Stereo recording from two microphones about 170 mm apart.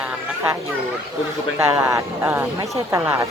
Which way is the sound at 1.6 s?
15° right (ahead or behind).